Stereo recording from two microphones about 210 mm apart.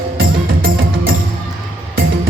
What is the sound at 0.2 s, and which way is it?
Music, 70° right (ahead or behind).